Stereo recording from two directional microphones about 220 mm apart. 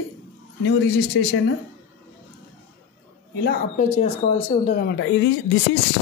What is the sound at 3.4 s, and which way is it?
Speech, 30° left (ahead or behind).